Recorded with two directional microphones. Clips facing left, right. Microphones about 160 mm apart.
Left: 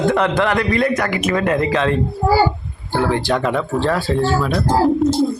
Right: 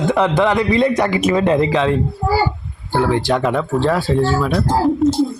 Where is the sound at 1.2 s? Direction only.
20° right (ahead or behind).